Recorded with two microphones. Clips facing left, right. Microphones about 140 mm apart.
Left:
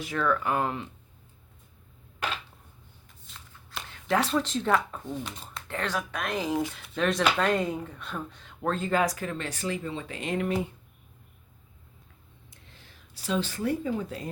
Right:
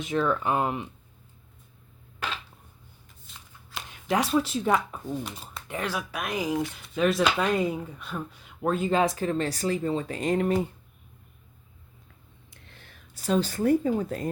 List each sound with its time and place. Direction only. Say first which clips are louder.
0.0 s speech: right 2 dB; 20° right (ahead or behind)
3.2 s shuffling cards: even; 5° right (ahead or behind)
3.8 s speech: even; 15° right (ahead or behind)
9.0 s speech: right 4 dB; 30° right (ahead or behind)
12.5 s a sound: right 2 dB; 60° right (ahead or behind); by 14.3 s 45° right (ahead or behind)